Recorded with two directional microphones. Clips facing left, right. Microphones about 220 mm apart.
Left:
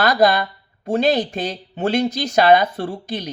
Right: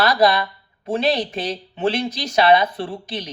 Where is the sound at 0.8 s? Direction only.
45° left (ahead or behind).